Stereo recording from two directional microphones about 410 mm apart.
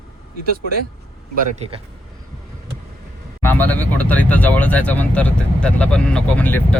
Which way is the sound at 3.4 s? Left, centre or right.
Centre.